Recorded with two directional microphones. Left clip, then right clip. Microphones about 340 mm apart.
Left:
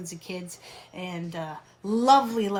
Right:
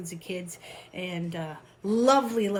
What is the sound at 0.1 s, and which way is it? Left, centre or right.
Speech, centre.